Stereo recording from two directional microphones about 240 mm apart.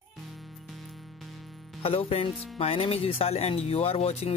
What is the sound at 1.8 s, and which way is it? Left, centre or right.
Speech, left.